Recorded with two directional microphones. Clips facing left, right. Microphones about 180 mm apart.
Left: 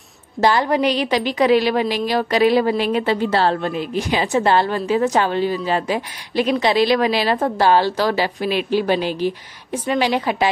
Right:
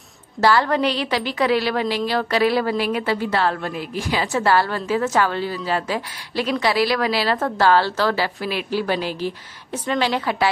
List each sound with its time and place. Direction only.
0.4 s a woman's voice: 15° left (ahead or behind)